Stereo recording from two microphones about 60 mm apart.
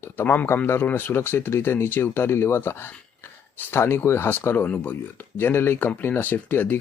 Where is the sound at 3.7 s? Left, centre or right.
Left.